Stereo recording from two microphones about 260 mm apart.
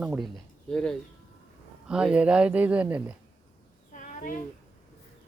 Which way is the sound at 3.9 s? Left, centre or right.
Left.